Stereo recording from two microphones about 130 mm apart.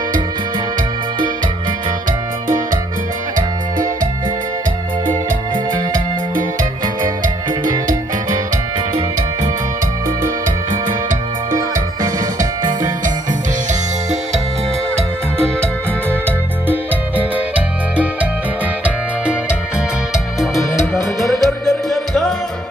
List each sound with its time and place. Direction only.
3.7 s music: 90° right
11.5 s music: 25° right (ahead or behind)
15.0 s music: 20° right (ahead or behind)
20.9 s music: centre (ahead or behind)